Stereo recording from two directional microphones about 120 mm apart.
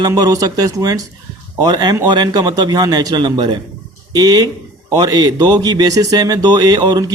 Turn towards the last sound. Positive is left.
turn(degrees=-35)  # may be behind; listen again after turning